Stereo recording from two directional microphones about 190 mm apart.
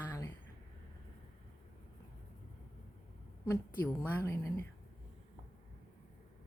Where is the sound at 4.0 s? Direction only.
10° left (ahead or behind).